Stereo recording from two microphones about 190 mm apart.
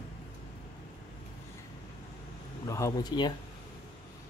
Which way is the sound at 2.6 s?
15° left (ahead or behind).